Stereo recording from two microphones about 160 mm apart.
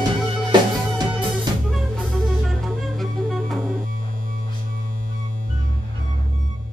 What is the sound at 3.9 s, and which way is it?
Music, 60° right (ahead or behind).